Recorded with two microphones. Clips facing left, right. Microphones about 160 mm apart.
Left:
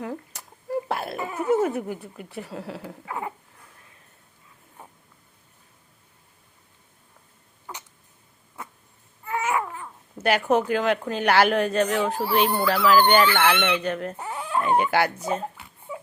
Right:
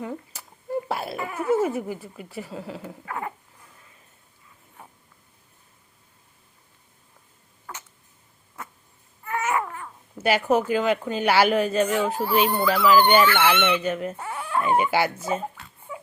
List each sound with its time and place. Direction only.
0.0 s a sound: centre (ahead or behind)
1.4 s speech: centre (ahead or behind)
3.1 s dog: 15° left (ahead or behind)
7.7 s a sound: 15° left (ahead or behind)
9.2 s babbling: 15° left (ahead or behind)
10.2 s speech: 5° right (ahead or behind)
12.5 s speech: 5° left (ahead or behind)
12.7 s speech: 5° right (ahead or behind)
13.5 s speech: 15° left (ahead or behind)
13.8 s speech: 5° right (ahead or behind)
14.2 s chicken: 15° left (ahead or behind)
14.6 s speech: 5° right (ahead or behind)
15.5 s a sound: 15° left (ahead or behind)